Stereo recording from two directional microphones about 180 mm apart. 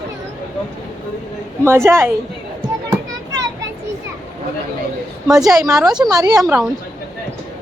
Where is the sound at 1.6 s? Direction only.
15° right (ahead or behind).